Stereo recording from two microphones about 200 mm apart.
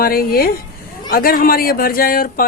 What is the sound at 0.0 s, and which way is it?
Speech, 45° left (ahead or behind).